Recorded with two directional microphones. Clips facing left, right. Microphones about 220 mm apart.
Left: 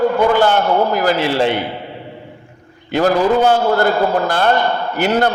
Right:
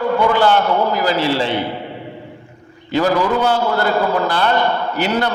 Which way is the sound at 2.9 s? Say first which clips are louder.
Left 2 dB; 50° left (ahead or behind).